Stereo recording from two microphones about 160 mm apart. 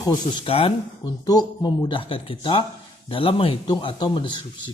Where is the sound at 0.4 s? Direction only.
35° left (ahead or behind).